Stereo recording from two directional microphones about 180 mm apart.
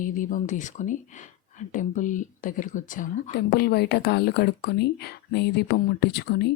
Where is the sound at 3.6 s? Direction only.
65° left (ahead or behind).